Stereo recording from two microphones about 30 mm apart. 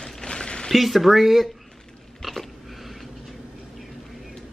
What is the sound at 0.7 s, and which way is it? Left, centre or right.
Speech, centre.